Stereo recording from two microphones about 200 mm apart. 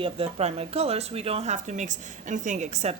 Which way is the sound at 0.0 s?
30° right (ahead or behind).